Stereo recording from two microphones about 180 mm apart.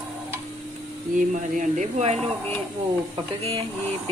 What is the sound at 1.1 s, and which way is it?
Speech, 45° right (ahead or behind).